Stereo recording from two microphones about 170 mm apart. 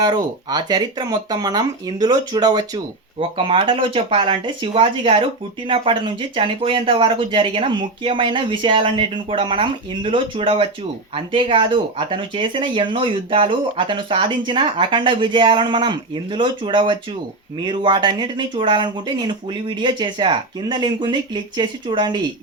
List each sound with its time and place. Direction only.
0.0 s speech: 25° right (ahead or behind)